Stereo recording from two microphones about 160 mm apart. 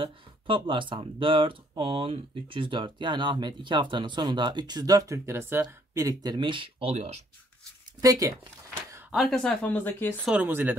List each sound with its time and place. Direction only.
0.0 s speech: 30° right (ahead or behind)
8.0 s speech: 20° right (ahead or behind)
9.1 s speech: centre (ahead or behind)
10.2 s speech: 10° right (ahead or behind)